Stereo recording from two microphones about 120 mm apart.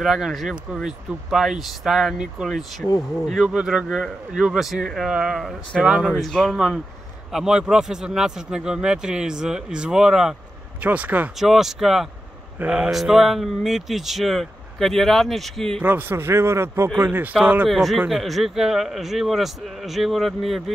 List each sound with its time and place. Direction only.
0.0 s speech: centre (ahead or behind)
11.3 s speech: centre (ahead or behind)
15.8 s a man's voice: 15° right (ahead or behind)
17.6 s speech: centre (ahead or behind)